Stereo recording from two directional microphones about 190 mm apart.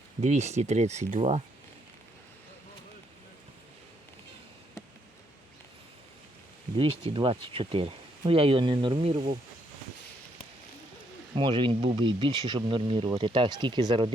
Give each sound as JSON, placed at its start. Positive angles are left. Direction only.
{"t": 0.2, "sound": "speech", "side_deg": -35}
{"t": 6.7, "sound": "speech", "side_deg": -30}
{"t": 11.3, "sound": "speech", "side_deg": -25}